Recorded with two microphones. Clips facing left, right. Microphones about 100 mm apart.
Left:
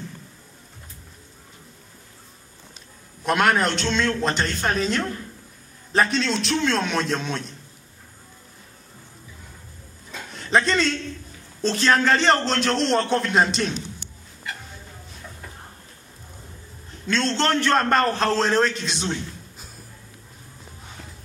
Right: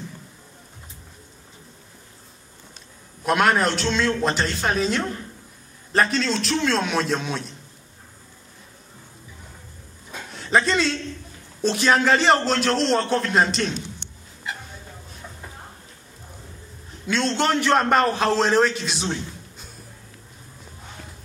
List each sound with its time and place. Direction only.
3.3 s a man's voice: centre (ahead or behind)
10.3 s a man's voice: 5° right (ahead or behind)
17.1 s a man's voice: 10° right (ahead or behind)